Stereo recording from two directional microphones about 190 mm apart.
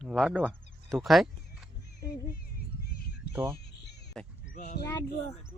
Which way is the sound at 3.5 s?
60° left (ahead or behind).